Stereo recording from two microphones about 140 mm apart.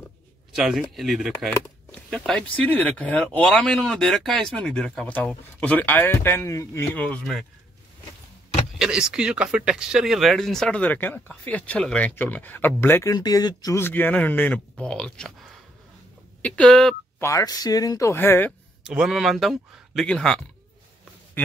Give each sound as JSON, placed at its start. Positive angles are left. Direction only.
{"t": 0.5, "sound": "speech", "side_deg": 0}
{"t": 8.7, "sound": "speech", "side_deg": -5}
{"t": 13.8, "sound": "speech", "side_deg": 15}
{"t": 16.4, "sound": "speech", "side_deg": 5}
{"t": 17.2, "sound": "speech", "side_deg": 25}
{"t": 18.9, "sound": "speech", "side_deg": -5}